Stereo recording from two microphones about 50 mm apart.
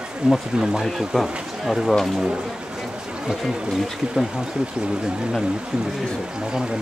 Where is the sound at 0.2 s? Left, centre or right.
Centre.